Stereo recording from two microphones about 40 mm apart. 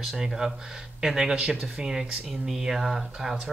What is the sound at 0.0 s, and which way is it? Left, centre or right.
Speech, centre.